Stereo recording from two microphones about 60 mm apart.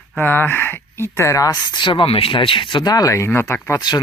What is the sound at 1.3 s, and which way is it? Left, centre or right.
Speech, left.